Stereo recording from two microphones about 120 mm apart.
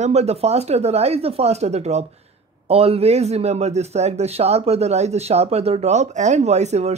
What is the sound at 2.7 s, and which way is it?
A man's voice, 55° right (ahead or behind).